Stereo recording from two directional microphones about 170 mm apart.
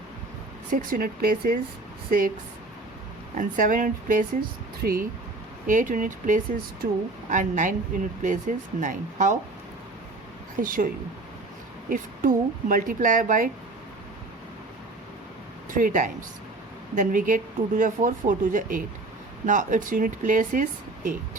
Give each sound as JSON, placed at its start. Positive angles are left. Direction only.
{"t": 0.7, "sound": "speech", "side_deg": -55}
{"t": 3.3, "sound": "speech", "side_deg": -50}
{"t": 5.6, "sound": "speech", "side_deg": -50}
{"t": 10.6, "sound": "speech", "side_deg": -55}
{"t": 11.9, "sound": "speech", "side_deg": -55}
{"t": 15.7, "sound": "speech", "side_deg": -50}